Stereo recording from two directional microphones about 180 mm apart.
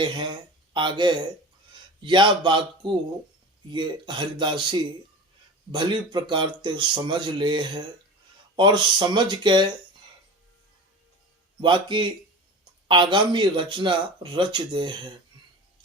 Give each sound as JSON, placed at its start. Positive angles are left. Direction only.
{"t": 0.0, "sound": "speech", "side_deg": -25}
{"t": 11.6, "sound": "speech", "side_deg": -25}